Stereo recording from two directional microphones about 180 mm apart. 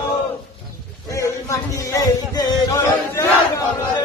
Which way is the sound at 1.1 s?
15° left (ahead or behind).